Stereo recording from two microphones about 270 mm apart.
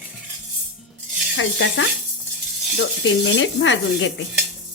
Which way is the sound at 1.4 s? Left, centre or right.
Left.